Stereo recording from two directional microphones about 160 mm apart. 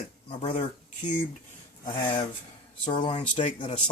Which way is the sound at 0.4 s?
40° left (ahead or behind).